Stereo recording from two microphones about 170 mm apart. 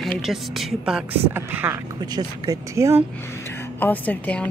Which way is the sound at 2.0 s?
25° right (ahead or behind).